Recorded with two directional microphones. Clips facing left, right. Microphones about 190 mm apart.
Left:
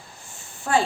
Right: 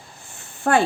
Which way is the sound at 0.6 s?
60° right (ahead or behind).